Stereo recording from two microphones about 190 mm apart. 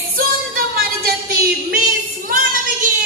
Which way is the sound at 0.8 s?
55° right (ahead or behind).